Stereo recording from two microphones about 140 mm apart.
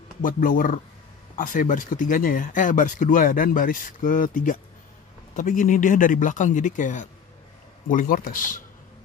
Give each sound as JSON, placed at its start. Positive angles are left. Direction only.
{"t": 0.2, "sound": "speech", "side_deg": 80}
{"t": 7.9, "sound": "speech", "side_deg": 85}